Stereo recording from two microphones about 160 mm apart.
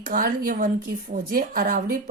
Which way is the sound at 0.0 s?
60° right (ahead or behind).